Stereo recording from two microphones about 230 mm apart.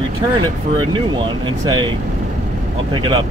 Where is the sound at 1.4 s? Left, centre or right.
Centre.